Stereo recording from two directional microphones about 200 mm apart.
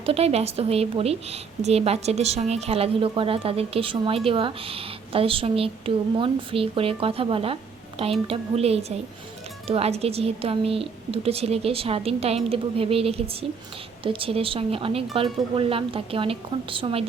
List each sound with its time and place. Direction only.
0.0 s a woman's voice: 30° right (ahead or behind)